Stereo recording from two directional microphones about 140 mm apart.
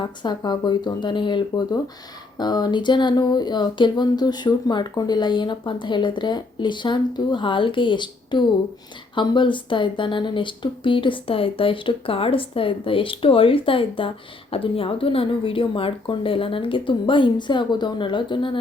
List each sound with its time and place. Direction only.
0.0 s speech: 30° left (ahead or behind)